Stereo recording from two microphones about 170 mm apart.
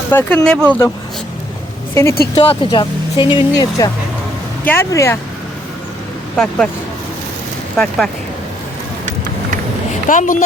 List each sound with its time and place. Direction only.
0.1 s speech: 15° left (ahead or behind)
2.3 s speech: 30° left (ahead or behind)
4.6 s speech: 15° left (ahead or behind)
6.3 s speech: 5° left (ahead or behind)
7.8 s speech: centre (ahead or behind)
9.9 s speech: 50° left (ahead or behind)